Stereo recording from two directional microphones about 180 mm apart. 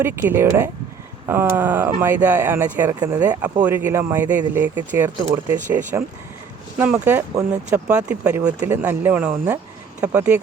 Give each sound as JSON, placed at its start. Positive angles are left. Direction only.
{"t": 0.0, "sound": "speech", "side_deg": -10}
{"t": 3.0, "sound": "speech", "side_deg": -20}
{"t": 3.6, "sound": "speech", "side_deg": -10}